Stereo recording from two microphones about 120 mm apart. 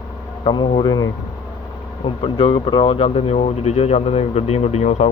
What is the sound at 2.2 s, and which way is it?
Speech, 50° left (ahead or behind).